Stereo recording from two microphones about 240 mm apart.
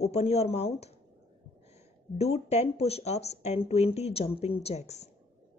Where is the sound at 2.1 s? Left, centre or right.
Left.